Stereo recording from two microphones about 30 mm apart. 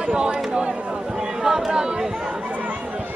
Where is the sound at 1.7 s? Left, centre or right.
Right.